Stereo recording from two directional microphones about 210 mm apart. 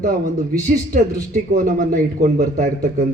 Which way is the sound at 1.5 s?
40° right (ahead or behind).